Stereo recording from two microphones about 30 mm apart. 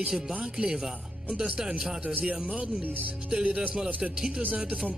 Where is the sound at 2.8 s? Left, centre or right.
Right.